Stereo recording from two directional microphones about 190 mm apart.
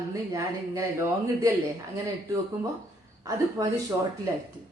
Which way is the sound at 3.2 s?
15° right (ahead or behind).